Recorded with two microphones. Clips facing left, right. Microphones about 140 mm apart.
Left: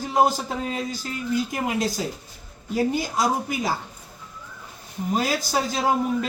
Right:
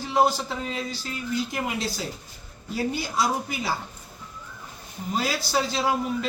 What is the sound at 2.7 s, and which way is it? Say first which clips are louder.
A man's voice: left 4 dB; 45° left (ahead or behind).